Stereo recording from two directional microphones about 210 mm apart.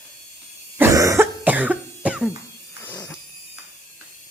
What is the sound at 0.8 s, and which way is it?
Cough, 15° right (ahead or behind).